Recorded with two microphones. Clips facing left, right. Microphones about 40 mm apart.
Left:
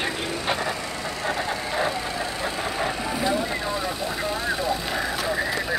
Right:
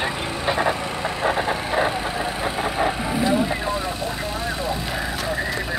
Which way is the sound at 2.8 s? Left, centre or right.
Centre.